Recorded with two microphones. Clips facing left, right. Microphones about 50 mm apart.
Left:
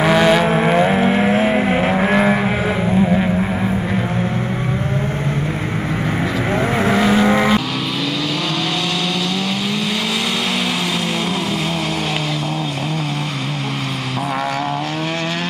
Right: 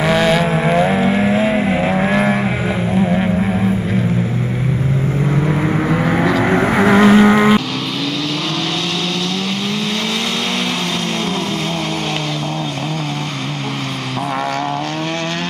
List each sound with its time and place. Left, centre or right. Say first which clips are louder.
0.0 s vehicle: left 1 dB; centre
0.6 s vehicle: even; centre
0.9 s vehicle: even; left
2.1 s vehicle: left 1 dB; centre
5.5 s vehicle: right 6 dB; right
7.2 s vehicle: right 4 dB; right